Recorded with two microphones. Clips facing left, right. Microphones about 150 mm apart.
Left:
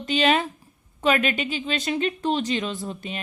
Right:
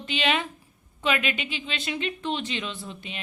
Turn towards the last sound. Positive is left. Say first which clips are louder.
# left 6 dB
turn(degrees=45)  # may be behind; listen again after turning